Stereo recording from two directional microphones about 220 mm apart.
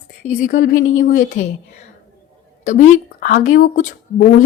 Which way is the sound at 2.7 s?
35° left (ahead or behind).